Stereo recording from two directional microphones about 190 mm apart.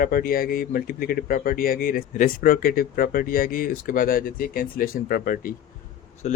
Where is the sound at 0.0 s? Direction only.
50° left (ahead or behind).